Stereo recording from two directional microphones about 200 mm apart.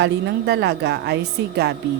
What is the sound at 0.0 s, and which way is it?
A woman's voice, 55° right (ahead or behind).